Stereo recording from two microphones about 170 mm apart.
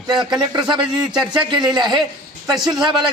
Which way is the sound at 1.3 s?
25° right (ahead or behind).